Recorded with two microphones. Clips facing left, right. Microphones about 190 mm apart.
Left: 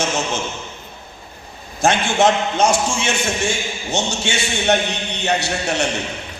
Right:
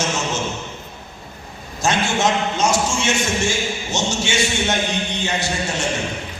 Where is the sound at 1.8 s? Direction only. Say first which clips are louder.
Left 4 dB; 55° left (ahead or behind).